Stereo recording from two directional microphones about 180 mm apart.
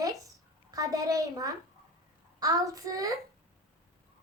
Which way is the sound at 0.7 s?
20° right (ahead or behind).